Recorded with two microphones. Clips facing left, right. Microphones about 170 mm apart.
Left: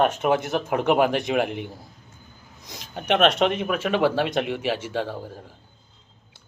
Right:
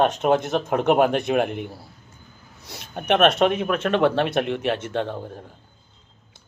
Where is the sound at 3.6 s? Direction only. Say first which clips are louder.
Right 2 dB; 5° left (ahead or behind).